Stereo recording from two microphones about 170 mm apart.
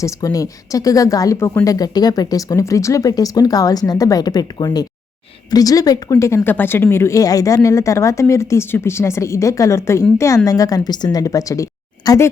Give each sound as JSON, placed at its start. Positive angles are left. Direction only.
{"t": 0.0, "sound": "a woman's voice", "side_deg": 20}